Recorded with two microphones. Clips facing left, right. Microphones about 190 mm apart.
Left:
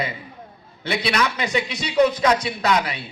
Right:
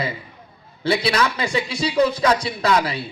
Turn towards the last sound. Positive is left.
turn(degrees=-30)  # may be behind; listen again after turning